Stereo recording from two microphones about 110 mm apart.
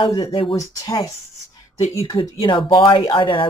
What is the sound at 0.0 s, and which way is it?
Speech, 50° left (ahead or behind).